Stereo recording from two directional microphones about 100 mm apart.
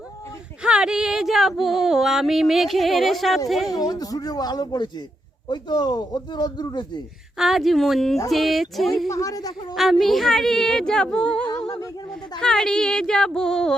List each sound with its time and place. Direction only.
0.6 s speech: 5° right (ahead or behind)
3.7 s speech: 40° left (ahead or behind)
7.3 s speech: 5° right (ahead or behind)
9.0 s speech: 35° left (ahead or behind)
9.7 s speech: centre (ahead or behind)